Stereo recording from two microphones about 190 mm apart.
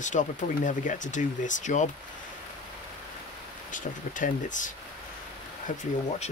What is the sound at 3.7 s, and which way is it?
Speech, 40° left (ahead or behind).